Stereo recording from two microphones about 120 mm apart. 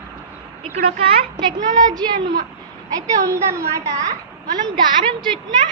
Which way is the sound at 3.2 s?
25° right (ahead or behind).